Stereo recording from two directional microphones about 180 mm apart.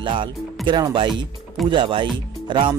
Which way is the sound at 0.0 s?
25° right (ahead or behind).